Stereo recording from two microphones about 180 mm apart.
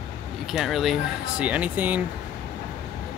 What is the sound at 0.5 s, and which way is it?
Speech, centre (ahead or behind).